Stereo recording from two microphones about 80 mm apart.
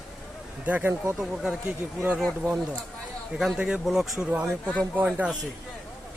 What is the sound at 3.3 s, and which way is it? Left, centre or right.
Speech, centre.